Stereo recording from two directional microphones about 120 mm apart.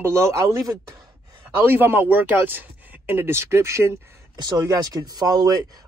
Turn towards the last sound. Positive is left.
turn(degrees=-30)  # may be behind; listen again after turning